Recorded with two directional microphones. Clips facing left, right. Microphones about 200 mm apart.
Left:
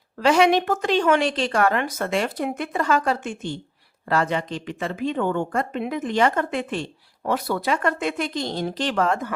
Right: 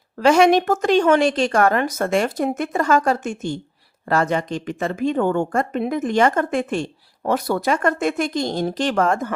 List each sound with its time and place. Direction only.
0.2 s a woman's voice: 45° right (ahead or behind)